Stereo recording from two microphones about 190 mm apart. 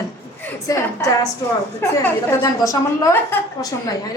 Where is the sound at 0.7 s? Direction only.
20° left (ahead or behind).